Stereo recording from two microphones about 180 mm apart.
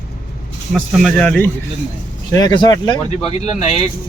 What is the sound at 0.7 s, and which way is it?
Speech, centre (ahead or behind).